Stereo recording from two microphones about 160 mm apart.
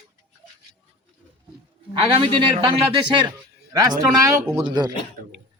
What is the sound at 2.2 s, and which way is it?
Speech, 35° right (ahead or behind).